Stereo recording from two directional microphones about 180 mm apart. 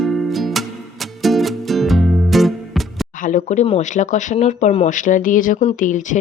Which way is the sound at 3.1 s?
45° left (ahead or behind).